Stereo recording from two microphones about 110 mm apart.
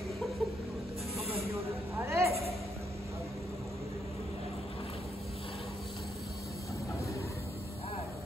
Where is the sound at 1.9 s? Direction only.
25° right (ahead or behind).